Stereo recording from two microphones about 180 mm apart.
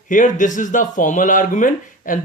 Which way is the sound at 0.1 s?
45° left (ahead or behind).